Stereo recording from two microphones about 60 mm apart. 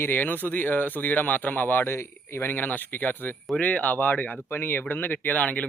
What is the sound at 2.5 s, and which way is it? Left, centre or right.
A man's voice, left.